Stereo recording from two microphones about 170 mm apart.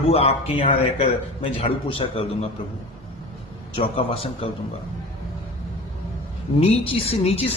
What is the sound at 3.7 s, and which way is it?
Speech, 35° left (ahead or behind).